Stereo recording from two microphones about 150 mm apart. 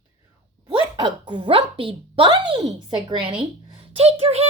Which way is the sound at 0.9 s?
30° right (ahead or behind).